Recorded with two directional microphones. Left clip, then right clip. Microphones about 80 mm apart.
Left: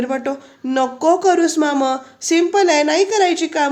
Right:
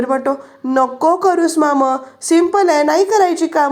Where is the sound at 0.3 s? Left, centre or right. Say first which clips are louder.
Right 4 dB; right.